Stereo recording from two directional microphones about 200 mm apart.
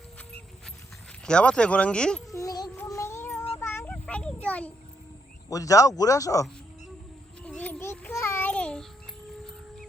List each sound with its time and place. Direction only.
1.2 s speech: 5° left (ahead or behind)
2.3 s music: 15° left (ahead or behind)
3.6 s a sound: 10° left (ahead or behind)
5.5 s speech: 15° left (ahead or behind)
7.4 s child singing: 5° left (ahead or behind)